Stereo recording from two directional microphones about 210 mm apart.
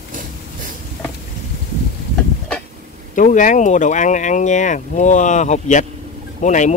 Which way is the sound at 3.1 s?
35° left (ahead or behind).